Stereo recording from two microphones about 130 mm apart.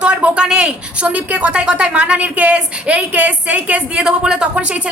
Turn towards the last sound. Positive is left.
turn(degrees=-10)  # may be behind; listen again after turning